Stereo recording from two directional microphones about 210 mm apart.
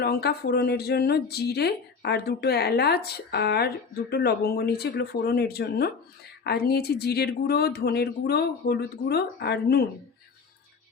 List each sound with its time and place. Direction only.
0.0 s speech: 50° left (ahead or behind)